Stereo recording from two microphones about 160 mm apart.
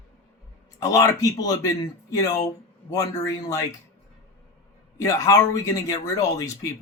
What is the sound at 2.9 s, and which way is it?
Speech, 20° left (ahead or behind).